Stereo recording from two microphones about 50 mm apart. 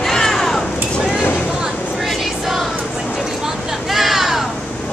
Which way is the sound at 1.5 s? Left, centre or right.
Centre.